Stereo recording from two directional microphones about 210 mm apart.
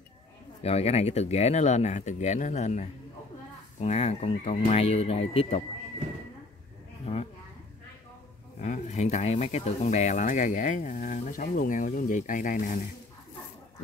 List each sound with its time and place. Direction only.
0.6 s speech: 30° left (ahead or behind)
8.5 s speech: 35° left (ahead or behind)